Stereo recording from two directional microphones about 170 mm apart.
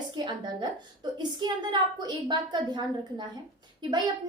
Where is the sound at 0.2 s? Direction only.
25° right (ahead or behind).